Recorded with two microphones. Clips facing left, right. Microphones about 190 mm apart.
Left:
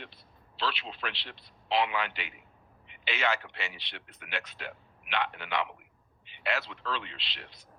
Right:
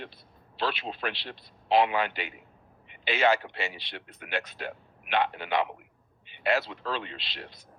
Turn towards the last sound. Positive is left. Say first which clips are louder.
# right 5 dB
turn(degrees=-40)  # may be behind; listen again after turning